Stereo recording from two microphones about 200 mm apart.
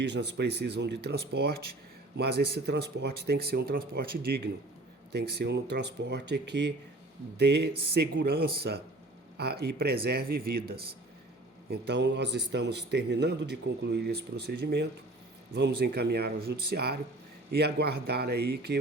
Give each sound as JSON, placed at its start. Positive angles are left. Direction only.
{"t": 0.0, "sound": "a man's voice", "side_deg": -60}
{"t": 5.1, "sound": "a man's voice", "side_deg": -55}